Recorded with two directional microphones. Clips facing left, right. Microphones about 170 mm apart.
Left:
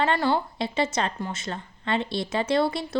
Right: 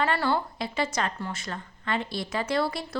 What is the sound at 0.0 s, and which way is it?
A woman's voice, 20° left (ahead or behind).